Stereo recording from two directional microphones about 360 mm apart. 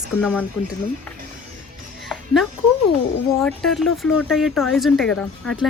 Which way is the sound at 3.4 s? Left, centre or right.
Centre.